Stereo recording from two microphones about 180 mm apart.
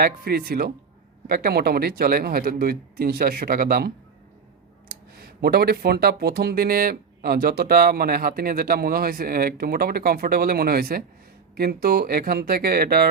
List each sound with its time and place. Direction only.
0.0 s speech: 55° right (ahead or behind)